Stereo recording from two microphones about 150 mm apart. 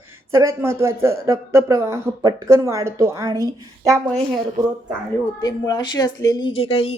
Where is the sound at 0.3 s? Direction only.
20° right (ahead or behind).